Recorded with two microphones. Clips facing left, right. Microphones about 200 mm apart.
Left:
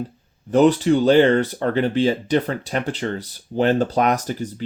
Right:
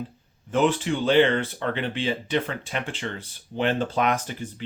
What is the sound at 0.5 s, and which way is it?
Speech, 40° left (ahead or behind).